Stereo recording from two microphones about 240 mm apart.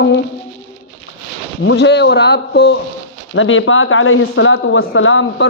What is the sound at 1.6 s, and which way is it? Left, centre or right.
Speech, left.